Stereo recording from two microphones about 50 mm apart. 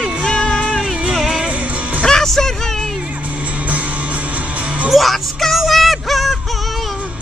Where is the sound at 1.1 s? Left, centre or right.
Centre.